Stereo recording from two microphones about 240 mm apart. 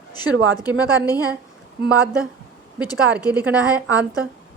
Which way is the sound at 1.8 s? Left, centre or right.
Centre.